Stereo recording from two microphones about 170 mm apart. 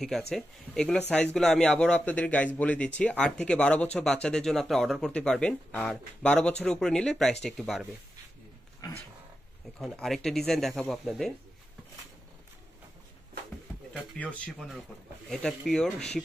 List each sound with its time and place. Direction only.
0.3 s a man's voice: 5° left (ahead or behind)
8.8 s cat: 20° left (ahead or behind)
9.8 s speech: centre (ahead or behind)
14.1 s a man's voice: 10° left (ahead or behind)